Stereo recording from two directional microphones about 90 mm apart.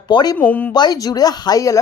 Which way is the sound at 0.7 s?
50° left (ahead or behind).